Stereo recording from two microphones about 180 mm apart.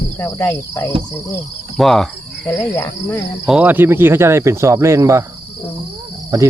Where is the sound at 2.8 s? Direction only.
15° left (ahead or behind).